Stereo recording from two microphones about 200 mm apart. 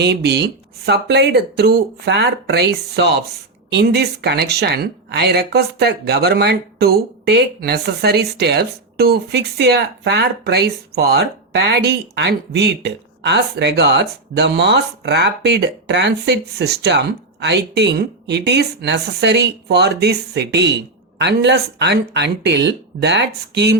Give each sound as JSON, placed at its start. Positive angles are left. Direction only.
{"t": 0.0, "sound": "speech", "side_deg": -55}